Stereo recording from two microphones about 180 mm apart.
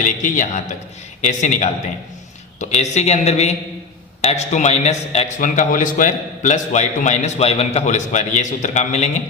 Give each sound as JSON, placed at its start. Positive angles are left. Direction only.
{"t": 0.0, "sound": "a man's voice", "side_deg": 45}